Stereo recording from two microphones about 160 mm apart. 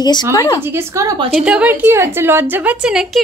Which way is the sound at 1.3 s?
5° right (ahead or behind).